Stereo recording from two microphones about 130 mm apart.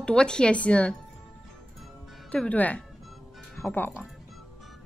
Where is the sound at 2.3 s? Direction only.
10° left (ahead or behind).